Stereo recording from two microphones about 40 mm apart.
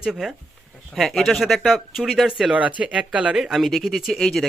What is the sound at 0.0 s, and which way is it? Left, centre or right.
Speech, centre.